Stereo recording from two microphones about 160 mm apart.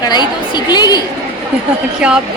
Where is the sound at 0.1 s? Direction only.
25° left (ahead or behind).